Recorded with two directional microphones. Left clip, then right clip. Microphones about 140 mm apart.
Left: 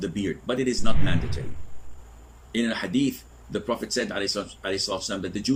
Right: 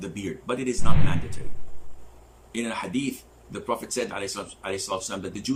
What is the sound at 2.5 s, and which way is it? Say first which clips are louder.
Speech: left 3 dB; 20° right (ahead or behind).